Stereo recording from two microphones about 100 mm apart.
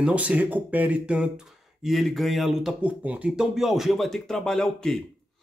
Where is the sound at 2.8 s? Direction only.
15° right (ahead or behind).